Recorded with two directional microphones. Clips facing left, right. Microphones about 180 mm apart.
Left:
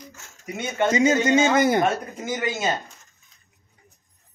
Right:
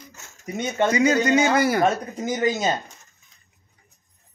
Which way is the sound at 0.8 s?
25° left (ahead or behind).